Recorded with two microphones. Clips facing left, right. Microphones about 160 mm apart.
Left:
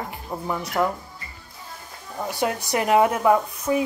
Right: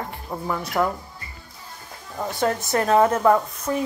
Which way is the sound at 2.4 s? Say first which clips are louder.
Right 2 dB; 15° left (ahead or behind).